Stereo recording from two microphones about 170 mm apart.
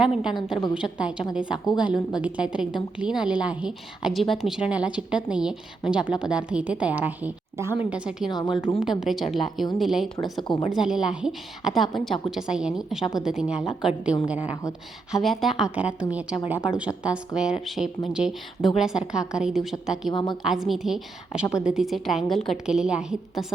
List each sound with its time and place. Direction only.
0.0 s a woman's voice: 5° right (ahead or behind)
8.3 s a woman's voice: 25° left (ahead or behind)
8.8 s a woman's voice: centre (ahead or behind)
20.7 s a woman's voice: centre (ahead or behind)